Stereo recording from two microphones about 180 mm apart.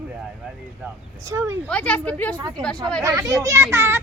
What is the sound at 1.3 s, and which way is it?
Speech, 15° right (ahead or behind).